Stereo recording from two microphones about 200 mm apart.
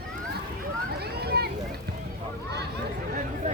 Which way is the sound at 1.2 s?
55° right (ahead or behind).